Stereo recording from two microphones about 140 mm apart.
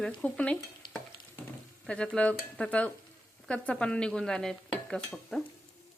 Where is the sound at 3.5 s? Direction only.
5° left (ahead or behind).